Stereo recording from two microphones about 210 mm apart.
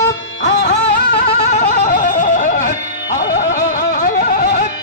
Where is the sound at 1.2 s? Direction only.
35° left (ahead or behind).